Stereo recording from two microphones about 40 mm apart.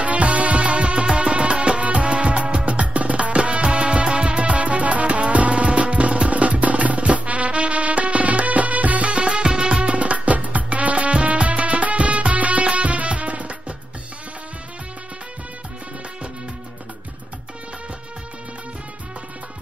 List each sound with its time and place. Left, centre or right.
0.0 s music: right